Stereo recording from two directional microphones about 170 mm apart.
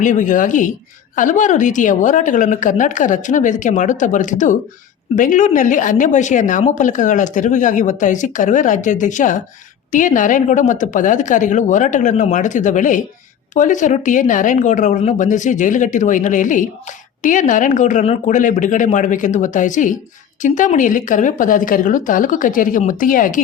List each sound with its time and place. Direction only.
0.0 s speech: 45° left (ahead or behind)